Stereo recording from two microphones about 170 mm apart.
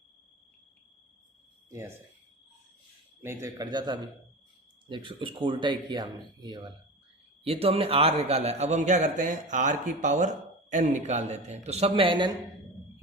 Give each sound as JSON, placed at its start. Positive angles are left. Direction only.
{"t": 3.2, "sound": "a man's voice", "side_deg": -15}